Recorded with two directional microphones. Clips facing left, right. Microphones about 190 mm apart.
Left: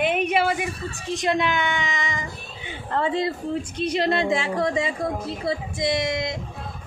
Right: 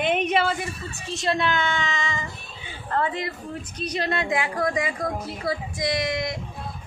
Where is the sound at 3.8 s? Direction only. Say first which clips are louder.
Left 4 dB; 25° left (ahead or behind).